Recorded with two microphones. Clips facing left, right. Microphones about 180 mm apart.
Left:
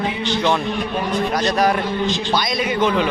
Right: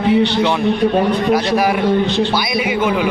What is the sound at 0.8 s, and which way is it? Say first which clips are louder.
Speech: right 9 dB; 65° right (ahead or behind).